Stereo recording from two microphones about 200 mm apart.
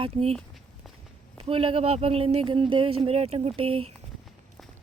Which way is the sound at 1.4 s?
25° right (ahead or behind).